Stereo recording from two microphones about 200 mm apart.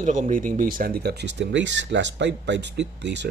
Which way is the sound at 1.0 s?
55° right (ahead or behind).